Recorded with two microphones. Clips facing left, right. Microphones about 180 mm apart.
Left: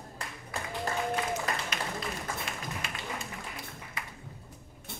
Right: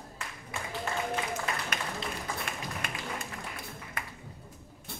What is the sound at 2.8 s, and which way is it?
Applause, 55° right (ahead or behind).